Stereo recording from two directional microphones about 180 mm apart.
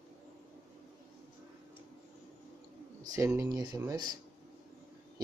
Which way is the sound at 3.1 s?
15° right (ahead or behind).